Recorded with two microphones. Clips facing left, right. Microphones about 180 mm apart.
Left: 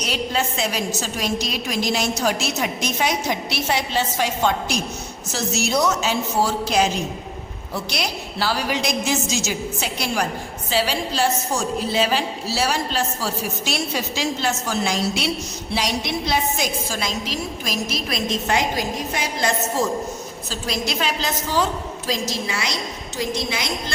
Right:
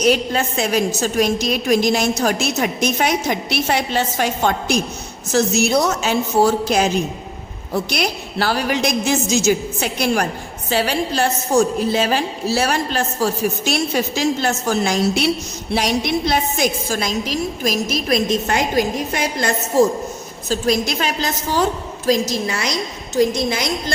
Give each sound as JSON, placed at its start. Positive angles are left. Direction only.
{"t": 0.0, "sound": "a woman's voice", "side_deg": -50}